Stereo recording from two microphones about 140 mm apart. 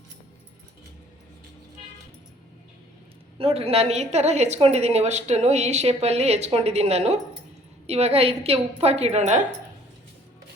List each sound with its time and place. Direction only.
3.3 s a woman's voice: 45° right (ahead or behind)